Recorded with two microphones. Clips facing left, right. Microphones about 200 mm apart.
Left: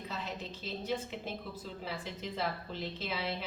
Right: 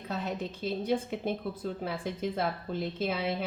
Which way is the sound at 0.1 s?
50° right (ahead or behind).